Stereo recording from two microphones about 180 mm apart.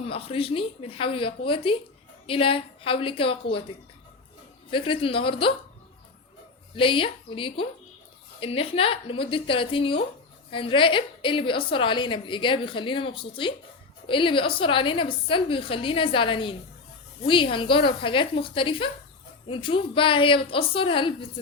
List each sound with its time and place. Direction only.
0.0 s speech: 35° left (ahead or behind)
4.7 s a woman's voice: 30° left (ahead or behind)
6.7 s a woman's voice: 30° left (ahead or behind)